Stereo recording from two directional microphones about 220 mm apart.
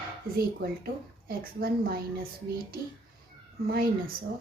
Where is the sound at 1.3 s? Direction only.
40° right (ahead or behind).